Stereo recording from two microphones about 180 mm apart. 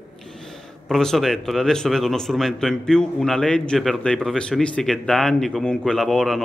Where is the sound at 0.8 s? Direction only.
Centre (ahead or behind).